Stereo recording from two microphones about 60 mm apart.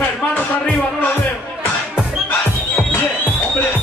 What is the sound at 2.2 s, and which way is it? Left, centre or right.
Music, left.